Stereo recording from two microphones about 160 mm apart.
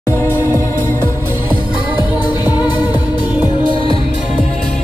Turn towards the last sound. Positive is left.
turn(degrees=25)  # may be behind; listen again after turning